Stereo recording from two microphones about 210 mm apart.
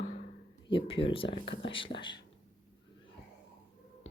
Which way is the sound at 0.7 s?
25° left (ahead or behind).